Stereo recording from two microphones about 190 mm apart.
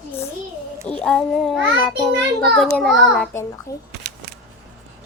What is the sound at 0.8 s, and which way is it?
A child's voice, 5° left (ahead or behind).